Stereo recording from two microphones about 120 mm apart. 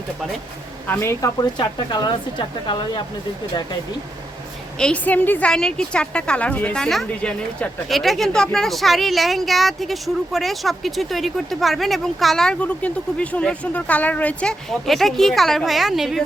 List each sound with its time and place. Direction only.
0.9 s speech: 20° left (ahead or behind)
1.4 s speech: 40° left (ahead or behind)
4.8 s a woman's voice: 10° left (ahead or behind)